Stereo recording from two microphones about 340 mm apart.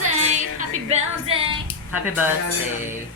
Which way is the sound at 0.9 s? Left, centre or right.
Centre.